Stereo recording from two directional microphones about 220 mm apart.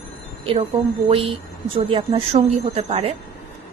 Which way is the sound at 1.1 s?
25° right (ahead or behind).